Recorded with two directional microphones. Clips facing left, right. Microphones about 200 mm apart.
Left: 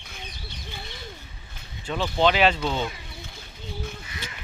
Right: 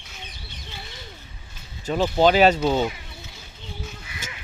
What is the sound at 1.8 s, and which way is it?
Speech, 40° right (ahead or behind).